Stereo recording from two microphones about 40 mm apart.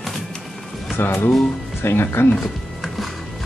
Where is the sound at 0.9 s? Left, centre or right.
Left.